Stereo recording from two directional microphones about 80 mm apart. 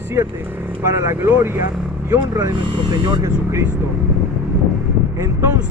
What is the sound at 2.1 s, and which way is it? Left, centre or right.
Speech, right.